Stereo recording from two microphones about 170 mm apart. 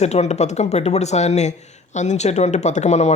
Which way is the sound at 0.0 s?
40° left (ahead or behind).